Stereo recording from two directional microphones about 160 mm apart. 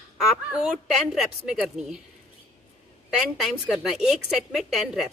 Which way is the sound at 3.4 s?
Centre (ahead or behind).